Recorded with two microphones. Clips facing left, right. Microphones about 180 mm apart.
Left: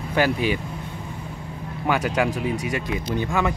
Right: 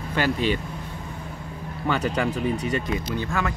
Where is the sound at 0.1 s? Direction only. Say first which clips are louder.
Left 2 dB; 10° left (ahead or behind).